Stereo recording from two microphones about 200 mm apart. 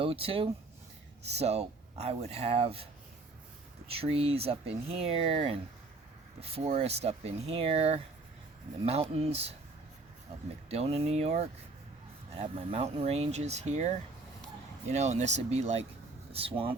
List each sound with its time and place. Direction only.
0.0 s speech: 30° right (ahead or behind)
3.8 s speech: 30° right (ahead or behind)
10.7 s speech: 30° right (ahead or behind)